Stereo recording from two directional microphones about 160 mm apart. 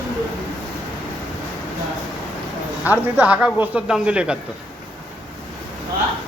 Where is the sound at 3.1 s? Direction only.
10° right (ahead or behind).